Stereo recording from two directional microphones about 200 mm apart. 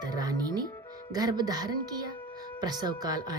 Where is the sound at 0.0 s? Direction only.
20° right (ahead or behind).